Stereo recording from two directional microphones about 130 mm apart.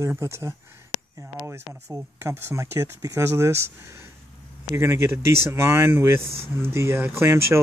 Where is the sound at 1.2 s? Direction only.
20° right (ahead or behind).